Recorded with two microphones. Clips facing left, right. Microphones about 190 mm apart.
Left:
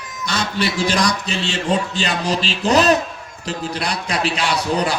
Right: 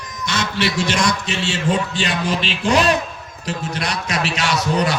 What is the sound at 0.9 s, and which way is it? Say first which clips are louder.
A man's voice: left 1 dB; 35° left (ahead or behind).